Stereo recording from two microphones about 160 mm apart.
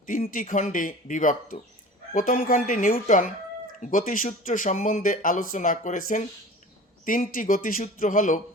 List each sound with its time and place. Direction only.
0.0 s speech: 60° left (ahead or behind)